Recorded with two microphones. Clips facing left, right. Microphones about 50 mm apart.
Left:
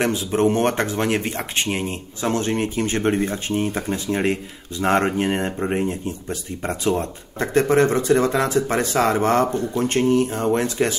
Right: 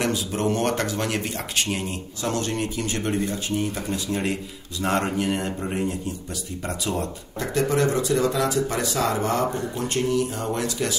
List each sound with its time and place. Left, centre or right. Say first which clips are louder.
0.0 s speech: left 5 dB; left